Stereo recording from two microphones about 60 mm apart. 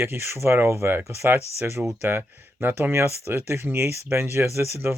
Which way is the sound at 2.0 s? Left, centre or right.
Right.